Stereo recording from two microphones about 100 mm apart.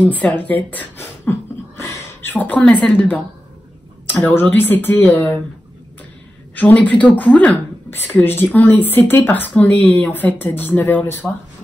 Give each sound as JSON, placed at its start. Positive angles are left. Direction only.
{"t": 0.0, "sound": "speech", "side_deg": 15}
{"t": 1.8, "sound": "gasp", "side_deg": 25}
{"t": 4.1, "sound": "speech", "side_deg": 20}
{"t": 6.5, "sound": "speech", "side_deg": 15}